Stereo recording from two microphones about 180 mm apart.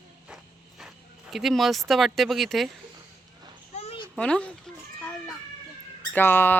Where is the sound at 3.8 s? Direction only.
30° left (ahead or behind).